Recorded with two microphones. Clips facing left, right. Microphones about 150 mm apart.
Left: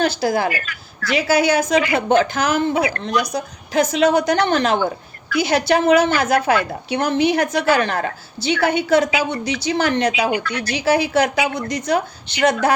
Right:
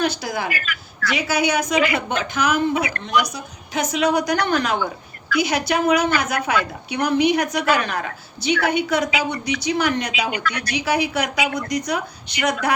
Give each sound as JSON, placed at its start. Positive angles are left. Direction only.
{"t": 0.0, "sound": "a woman's voice", "side_deg": 35}